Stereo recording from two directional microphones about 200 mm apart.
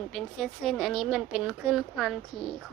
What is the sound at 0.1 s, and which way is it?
A woman's voice, centre (ahead or behind).